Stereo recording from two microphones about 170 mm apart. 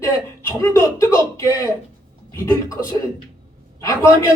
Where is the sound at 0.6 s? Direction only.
20° left (ahead or behind).